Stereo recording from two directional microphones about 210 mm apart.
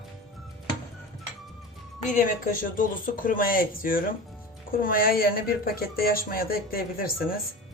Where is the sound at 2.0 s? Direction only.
40° left (ahead or behind).